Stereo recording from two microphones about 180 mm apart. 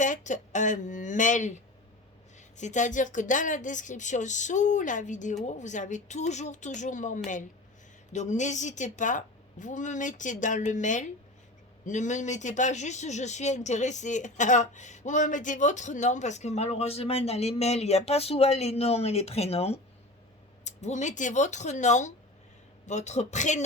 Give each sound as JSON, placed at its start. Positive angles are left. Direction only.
{"t": 0.0, "sound": "a woman's voice", "side_deg": 45}